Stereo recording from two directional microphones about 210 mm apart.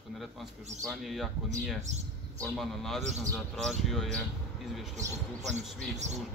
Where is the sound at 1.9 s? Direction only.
35° right (ahead or behind).